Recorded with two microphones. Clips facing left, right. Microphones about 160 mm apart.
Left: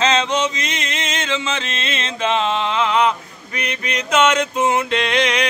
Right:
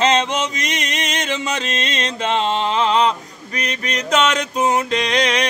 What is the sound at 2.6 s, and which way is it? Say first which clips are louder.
Mantra: right 1 dB; 35° right (ahead or behind).